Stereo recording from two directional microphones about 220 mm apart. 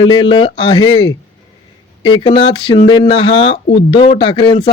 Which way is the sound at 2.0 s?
20° left (ahead or behind).